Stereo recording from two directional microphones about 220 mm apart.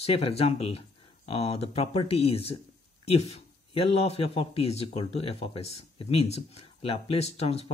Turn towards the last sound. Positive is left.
turn(degrees=30)  # may be behind; listen again after turning